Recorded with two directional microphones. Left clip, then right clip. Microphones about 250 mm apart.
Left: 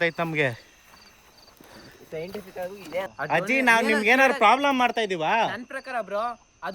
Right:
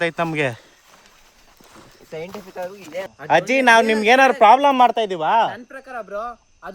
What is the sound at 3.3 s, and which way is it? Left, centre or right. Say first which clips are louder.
A man's voice: right 7 dB; right.